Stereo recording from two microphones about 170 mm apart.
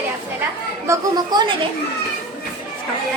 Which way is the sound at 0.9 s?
25° right (ahead or behind).